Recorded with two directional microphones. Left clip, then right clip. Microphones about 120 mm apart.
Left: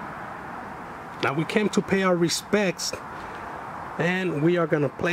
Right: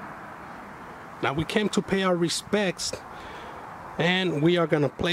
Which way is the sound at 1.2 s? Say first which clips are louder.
Left 1 dB; 15° right (ahead or behind).